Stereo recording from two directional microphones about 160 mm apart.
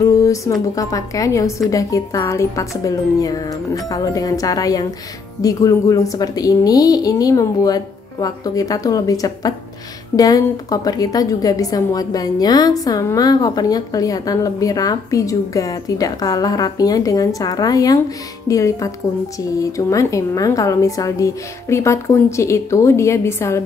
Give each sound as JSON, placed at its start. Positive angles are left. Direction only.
{"t": 0.0, "sound": "a woman's voice", "side_deg": 20}